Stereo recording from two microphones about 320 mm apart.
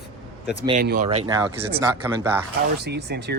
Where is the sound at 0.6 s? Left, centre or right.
Centre.